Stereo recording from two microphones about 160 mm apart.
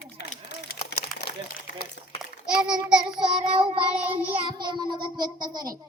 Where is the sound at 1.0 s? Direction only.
80° left.